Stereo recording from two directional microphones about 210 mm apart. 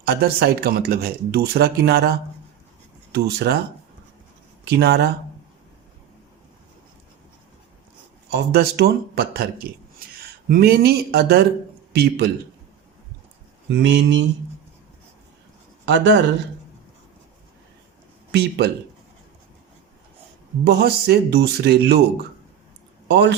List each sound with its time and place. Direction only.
0.0 s speech: 45° right (ahead or behind)
4.8 s speech: 45° right (ahead or behind)
8.3 s speech: 50° right (ahead or behind)
13.7 s speech: 55° right (ahead or behind)
15.9 s speech: 60° right (ahead or behind)
18.3 s speech: 50° right (ahead or behind)
20.7 s speech: 50° right (ahead or behind)
23.0 s speech: 55° right (ahead or behind)